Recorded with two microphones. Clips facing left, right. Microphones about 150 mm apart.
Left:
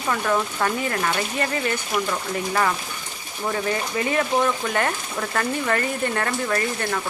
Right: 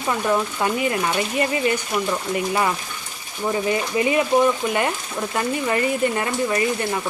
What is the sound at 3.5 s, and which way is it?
Speech, 10° right (ahead or behind).